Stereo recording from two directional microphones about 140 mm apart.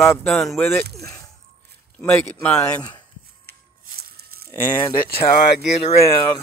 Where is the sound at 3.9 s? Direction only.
90° right.